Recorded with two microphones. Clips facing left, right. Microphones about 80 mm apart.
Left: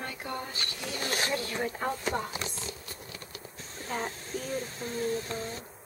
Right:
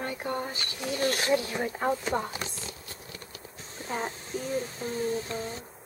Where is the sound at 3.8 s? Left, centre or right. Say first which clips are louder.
Right 2 dB; centre.